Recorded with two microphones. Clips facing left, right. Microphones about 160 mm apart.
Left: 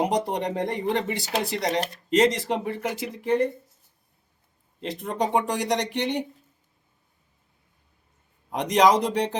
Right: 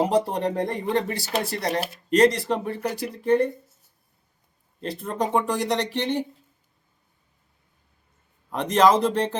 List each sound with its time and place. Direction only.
0.0 s speech: 15° left (ahead or behind)
4.8 s speech: 20° left (ahead or behind)
8.4 s speech: 15° left (ahead or behind)